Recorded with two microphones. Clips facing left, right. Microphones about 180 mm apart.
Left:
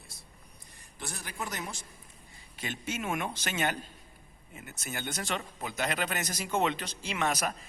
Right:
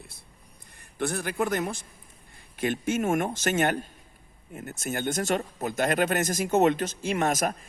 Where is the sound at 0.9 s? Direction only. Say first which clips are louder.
Right 12 dB; 60° right (ahead or behind).